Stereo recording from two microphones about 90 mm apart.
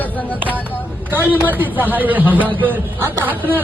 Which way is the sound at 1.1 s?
20° right (ahead or behind).